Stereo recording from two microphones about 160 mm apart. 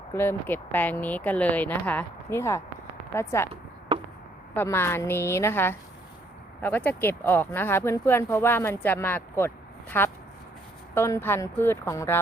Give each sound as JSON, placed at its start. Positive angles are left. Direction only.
{"t": 0.1, "sound": "speech", "side_deg": 15}
{"t": 4.5, "sound": "speech", "side_deg": 15}